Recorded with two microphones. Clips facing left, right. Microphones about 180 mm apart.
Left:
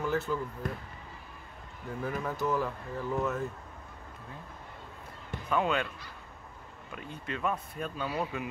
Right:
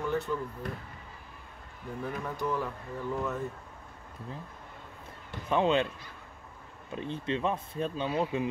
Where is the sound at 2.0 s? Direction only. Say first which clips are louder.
Left 2 dB; centre (ahead or behind).